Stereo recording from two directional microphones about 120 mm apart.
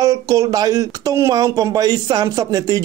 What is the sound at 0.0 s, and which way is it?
Speech, 25° right (ahead or behind).